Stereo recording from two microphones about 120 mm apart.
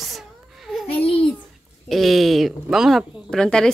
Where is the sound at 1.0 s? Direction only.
50° left (ahead or behind).